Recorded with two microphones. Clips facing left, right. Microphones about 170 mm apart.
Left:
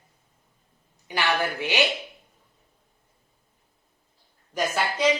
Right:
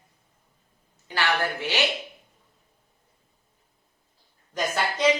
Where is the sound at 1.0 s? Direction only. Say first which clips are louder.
Even; 15° left (ahead or behind).